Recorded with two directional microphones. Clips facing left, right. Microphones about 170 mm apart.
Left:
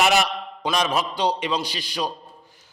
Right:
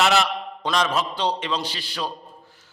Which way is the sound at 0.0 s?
15° left (ahead or behind).